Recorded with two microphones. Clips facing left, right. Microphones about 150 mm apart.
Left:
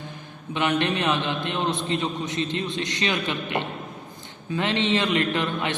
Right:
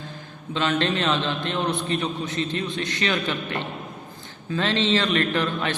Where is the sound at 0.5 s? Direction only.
15° left (ahead or behind).